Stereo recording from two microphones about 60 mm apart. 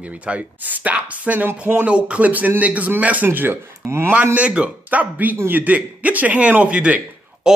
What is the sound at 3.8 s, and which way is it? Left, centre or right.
Speech, right.